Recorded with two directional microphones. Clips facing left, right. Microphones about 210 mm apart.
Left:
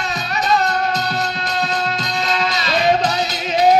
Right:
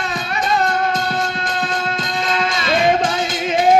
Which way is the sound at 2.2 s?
50° right (ahead or behind).